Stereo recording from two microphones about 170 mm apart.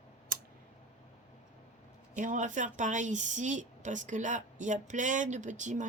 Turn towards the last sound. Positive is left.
turn(degrees=-45)  # may be behind; listen again after turning